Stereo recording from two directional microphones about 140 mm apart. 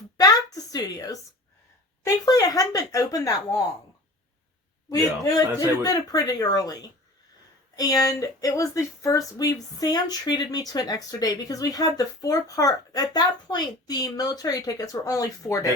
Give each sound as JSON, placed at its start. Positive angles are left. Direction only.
{"t": 0.2, "sound": "a sound", "side_deg": 25}
{"t": 2.2, "sound": "speech", "side_deg": 25}
{"t": 4.9, "sound": "speech", "side_deg": 25}
{"t": 7.8, "sound": "speech", "side_deg": 25}